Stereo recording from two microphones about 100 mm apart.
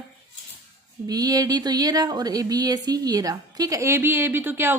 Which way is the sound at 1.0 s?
40° right (ahead or behind).